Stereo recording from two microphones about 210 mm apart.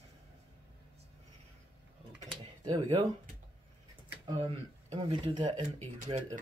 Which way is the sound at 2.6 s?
25° right (ahead or behind).